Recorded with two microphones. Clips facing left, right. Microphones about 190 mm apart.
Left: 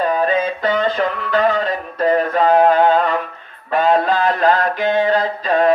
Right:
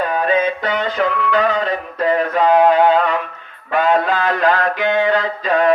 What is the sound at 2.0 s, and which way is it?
Music, 40° left (ahead or behind).